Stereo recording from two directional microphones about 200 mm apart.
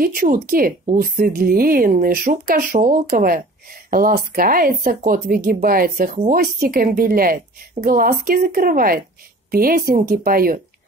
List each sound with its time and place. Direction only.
0.0 s a woman's voice: 45° right (ahead or behind)